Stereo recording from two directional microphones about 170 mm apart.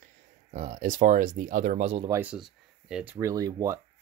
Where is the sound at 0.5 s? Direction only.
45° right (ahead or behind).